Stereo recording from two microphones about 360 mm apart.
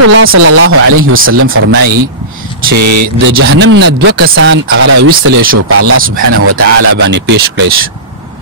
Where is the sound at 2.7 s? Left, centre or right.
Right.